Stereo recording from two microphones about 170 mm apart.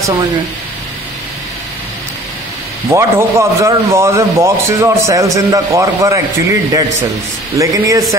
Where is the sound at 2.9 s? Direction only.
15° right (ahead or behind).